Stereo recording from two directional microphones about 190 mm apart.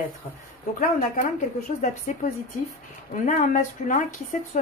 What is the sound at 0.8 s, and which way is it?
A woman's voice, 45° left (ahead or behind).